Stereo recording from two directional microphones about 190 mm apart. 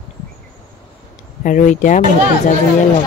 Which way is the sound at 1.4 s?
40° left (ahead or behind).